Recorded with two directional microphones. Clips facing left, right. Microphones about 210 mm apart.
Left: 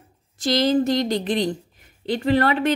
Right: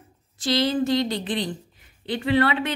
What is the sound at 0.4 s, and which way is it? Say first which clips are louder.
Speech: left 3 dB; 40° left (ahead or behind).